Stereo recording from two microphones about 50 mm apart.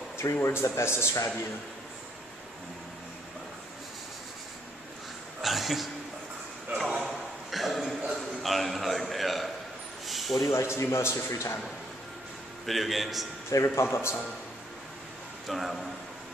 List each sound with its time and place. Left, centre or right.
0.2 s speech: left
5.4 s a sound: centre
7.0 s a sound: centre
10.4 s a man's voice: left
12.6 s a man's voice: centre
13.5 s speech: left
15.4 s a man's voice: centre